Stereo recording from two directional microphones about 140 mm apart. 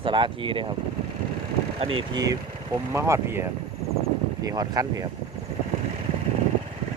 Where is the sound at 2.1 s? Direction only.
25° right (ahead or behind).